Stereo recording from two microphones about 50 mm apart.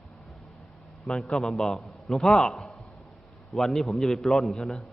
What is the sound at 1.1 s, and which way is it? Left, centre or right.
A man's voice, centre.